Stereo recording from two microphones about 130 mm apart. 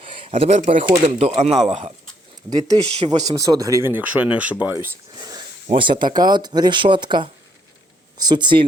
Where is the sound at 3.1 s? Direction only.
30° right (ahead or behind).